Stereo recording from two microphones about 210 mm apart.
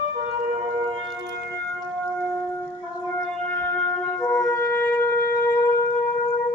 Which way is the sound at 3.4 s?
10° left (ahead or behind).